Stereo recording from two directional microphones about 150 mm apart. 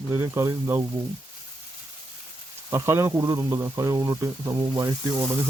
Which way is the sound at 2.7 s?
20° right (ahead or behind).